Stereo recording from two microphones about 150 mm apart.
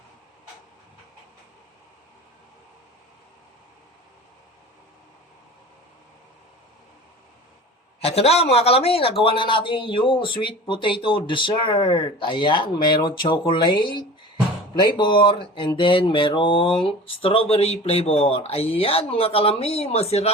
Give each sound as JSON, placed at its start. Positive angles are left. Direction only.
{"t": 8.0, "sound": "a man's voice", "side_deg": 45}